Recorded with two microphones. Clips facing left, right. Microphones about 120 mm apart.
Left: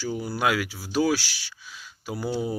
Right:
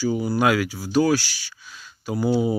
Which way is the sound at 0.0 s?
Centre (ahead or behind).